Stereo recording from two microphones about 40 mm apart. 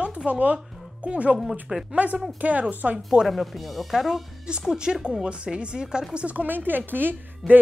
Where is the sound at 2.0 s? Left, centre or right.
Right.